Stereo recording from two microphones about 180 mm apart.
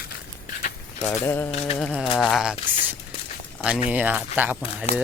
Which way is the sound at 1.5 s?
35° left (ahead or behind).